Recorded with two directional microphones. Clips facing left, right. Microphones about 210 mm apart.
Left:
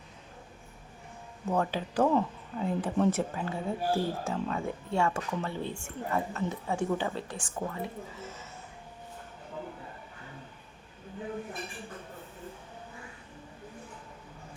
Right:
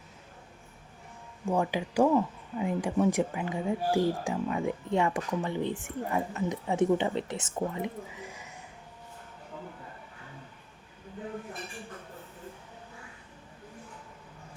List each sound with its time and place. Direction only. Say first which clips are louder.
1.5 s speech: right 1 dB; 10° right (ahead or behind)